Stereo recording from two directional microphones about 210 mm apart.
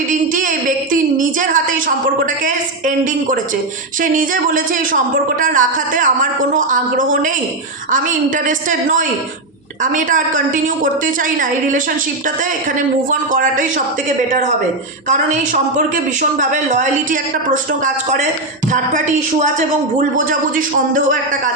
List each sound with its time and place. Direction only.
0.1 s a sound: 40° right (ahead or behind)
2.2 s a woman's voice: 40° right (ahead or behind)
8.4 s a woman's voice: 40° right (ahead or behind)
16.4 s a woman's voice: 40° right (ahead or behind)